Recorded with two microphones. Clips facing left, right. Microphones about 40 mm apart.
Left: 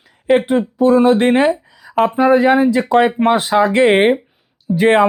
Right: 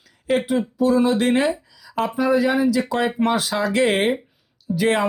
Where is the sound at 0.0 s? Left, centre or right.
Left.